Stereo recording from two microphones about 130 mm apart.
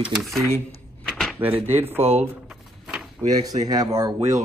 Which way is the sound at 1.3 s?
15° right (ahead or behind).